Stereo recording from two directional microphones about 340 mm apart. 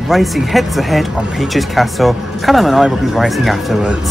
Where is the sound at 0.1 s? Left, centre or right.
Centre.